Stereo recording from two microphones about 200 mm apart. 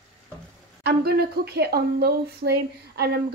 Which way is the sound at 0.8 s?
55° right (ahead or behind).